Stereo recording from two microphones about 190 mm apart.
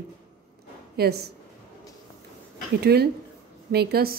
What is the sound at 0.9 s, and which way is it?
Speech, 55° right (ahead or behind).